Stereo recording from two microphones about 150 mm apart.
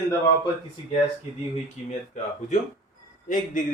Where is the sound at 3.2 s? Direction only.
60° left (ahead or behind).